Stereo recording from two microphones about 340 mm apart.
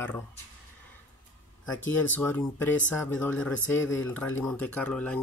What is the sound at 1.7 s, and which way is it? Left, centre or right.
Speech, left.